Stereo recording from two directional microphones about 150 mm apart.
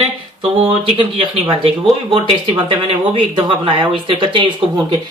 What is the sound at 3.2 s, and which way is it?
Speech, 35° right (ahead or behind).